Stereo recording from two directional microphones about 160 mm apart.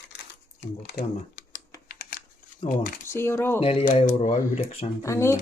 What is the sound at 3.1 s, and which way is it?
Speech, 15° left (ahead or behind).